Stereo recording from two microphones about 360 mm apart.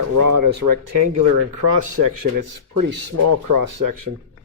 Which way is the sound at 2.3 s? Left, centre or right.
Right.